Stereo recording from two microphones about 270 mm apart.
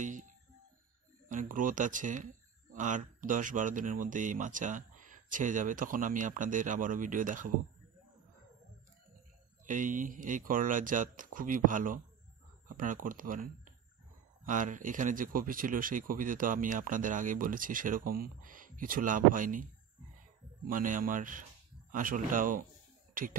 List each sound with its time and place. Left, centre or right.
0.0 s music: right
1.3 s speech: right
9.7 s speech: right
20.6 s speech: right